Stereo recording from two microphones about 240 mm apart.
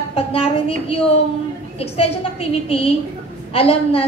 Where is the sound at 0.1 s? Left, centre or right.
Left.